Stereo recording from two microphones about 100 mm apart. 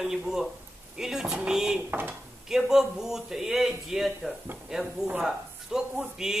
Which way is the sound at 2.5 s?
5° right (ahead or behind).